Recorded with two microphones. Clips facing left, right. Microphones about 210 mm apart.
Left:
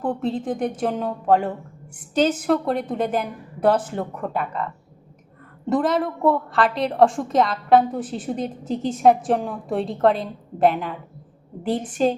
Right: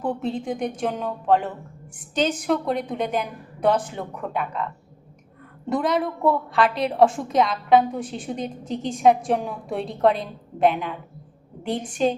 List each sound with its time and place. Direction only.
0.0 s a woman's voice: centre (ahead or behind)
5.6 s a woman's voice: centre (ahead or behind)